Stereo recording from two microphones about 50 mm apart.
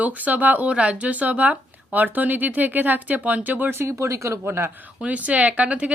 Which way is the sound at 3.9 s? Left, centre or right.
Right.